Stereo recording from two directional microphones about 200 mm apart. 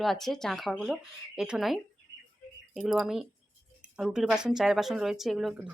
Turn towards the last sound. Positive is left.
turn(degrees=0)  # may be behind; listen again after turning